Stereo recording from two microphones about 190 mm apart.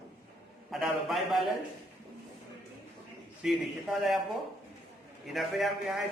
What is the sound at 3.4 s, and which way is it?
Speech, centre (ahead or behind).